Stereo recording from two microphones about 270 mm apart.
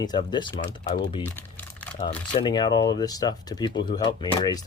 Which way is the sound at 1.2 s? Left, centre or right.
Centre.